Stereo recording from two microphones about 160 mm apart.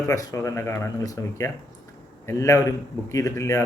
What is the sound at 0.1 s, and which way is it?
A man's voice, 20° left (ahead or behind).